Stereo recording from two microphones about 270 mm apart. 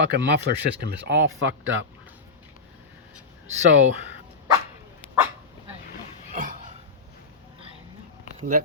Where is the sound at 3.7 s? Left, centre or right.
Right.